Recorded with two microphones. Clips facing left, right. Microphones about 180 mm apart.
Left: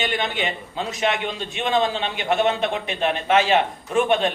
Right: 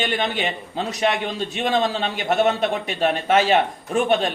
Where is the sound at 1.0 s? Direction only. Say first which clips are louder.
Right 2 dB; 40° right (ahead or behind).